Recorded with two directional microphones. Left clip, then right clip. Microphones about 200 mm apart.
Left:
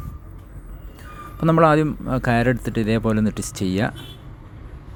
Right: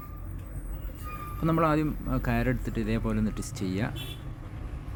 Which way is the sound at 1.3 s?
30° left (ahead or behind).